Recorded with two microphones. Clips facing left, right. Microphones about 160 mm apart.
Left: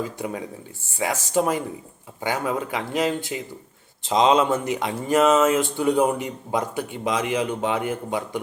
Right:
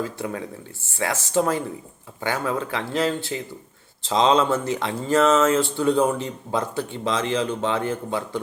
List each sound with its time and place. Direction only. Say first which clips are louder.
0.0 s speech: even; 15° left (ahead or behind)